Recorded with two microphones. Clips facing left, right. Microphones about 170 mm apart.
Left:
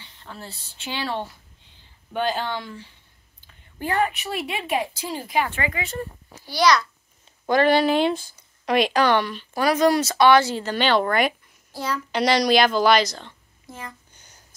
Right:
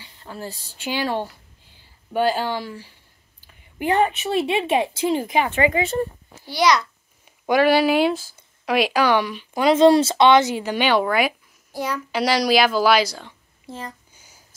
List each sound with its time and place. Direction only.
0.0 s a sound: 10° right (ahead or behind)
0.8 s a woman's voice: 10° right (ahead or behind)
7.4 s speech: 10° right (ahead or behind)
11.7 s child singing: 15° right (ahead or behind)
12.1 s speech: 5° right (ahead or behind)
13.7 s speech: 35° right (ahead or behind)
14.1 s a sound: 5° right (ahead or behind)